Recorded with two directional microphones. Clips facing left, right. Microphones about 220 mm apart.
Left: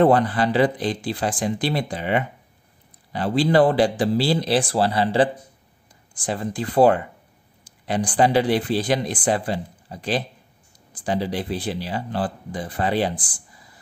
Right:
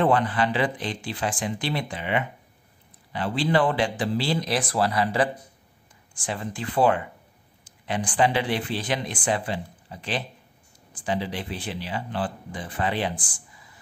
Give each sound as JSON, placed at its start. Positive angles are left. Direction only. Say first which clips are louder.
{"t": 0.0, "sound": "speech", "louder": "left 5 dB", "side_deg": 35}